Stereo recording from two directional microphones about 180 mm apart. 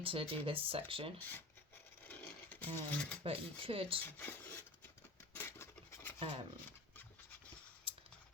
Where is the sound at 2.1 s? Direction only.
10° left (ahead or behind).